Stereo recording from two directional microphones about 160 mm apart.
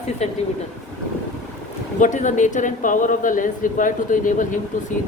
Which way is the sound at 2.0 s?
50° left (ahead or behind).